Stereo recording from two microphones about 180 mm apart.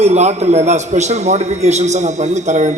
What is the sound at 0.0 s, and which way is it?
A man's voice, 40° right (ahead or behind).